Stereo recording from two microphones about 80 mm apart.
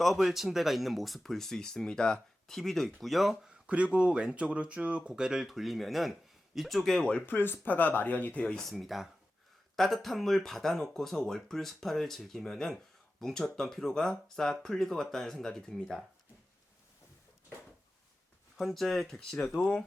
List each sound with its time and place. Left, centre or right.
0.0 s speech: centre
3.7 s speech: centre
7.3 s speech: left
8.7 s speech: centre
18.5 s speech: centre